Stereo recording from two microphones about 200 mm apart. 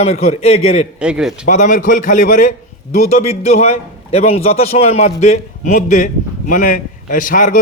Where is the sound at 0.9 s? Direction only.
5° right (ahead or behind).